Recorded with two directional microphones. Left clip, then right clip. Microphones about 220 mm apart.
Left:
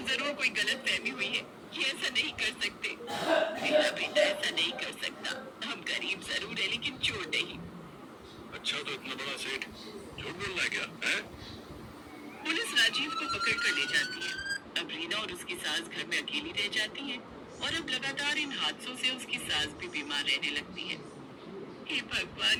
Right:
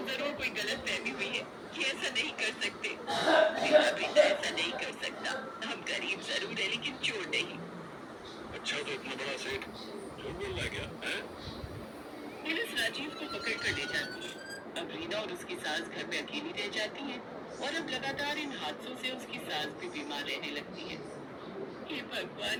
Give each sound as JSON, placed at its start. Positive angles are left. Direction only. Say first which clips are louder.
{"t": 0.0, "sound": "a man's voice", "louder": "left 4 dB", "side_deg": 35}
{"t": 8.6, "sound": "speech", "louder": "left 1 dB", "side_deg": 30}
{"t": 12.5, "sound": "a man's voice", "louder": "left 5 dB", "side_deg": 40}